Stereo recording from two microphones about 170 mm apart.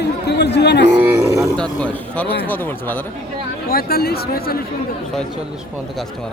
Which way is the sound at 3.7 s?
60° left (ahead or behind).